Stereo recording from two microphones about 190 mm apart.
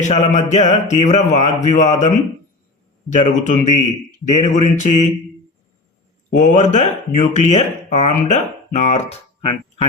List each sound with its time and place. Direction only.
0.0 s speech: 35° left (ahead or behind)
6.3 s speech: 40° left (ahead or behind)